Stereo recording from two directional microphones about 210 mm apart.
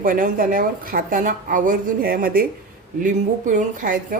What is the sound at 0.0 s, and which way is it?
A woman's voice, 40° right (ahead or behind).